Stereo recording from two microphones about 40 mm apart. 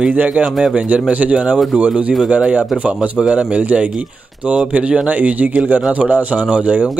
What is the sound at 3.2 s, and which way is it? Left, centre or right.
Speech, right.